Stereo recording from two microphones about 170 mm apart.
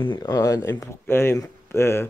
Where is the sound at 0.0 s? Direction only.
25° left (ahead or behind).